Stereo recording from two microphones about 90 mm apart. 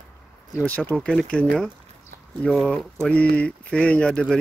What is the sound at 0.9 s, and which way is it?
Speech, 10° left (ahead or behind).